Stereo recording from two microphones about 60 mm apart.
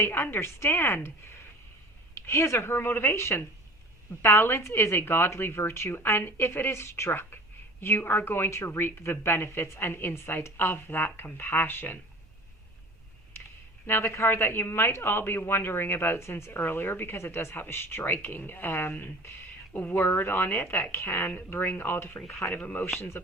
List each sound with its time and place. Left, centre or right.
0.0 s speech: left
2.2 s speech: left
7.1 s speech: left
13.8 s speech: left
20.9 s speech: left
21.2 s speech: left
23.0 s speech: left